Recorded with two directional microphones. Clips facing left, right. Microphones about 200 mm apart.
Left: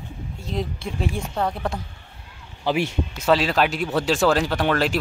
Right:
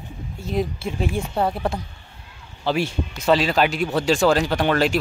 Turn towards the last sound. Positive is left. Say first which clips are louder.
# right 2 dB
turn(degrees=0)  # may be behind; listen again after turning